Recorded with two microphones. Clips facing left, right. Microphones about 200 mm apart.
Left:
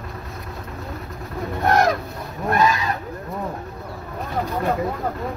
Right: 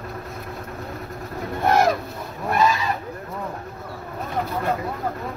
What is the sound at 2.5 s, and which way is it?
Goose, centre (ahead or behind).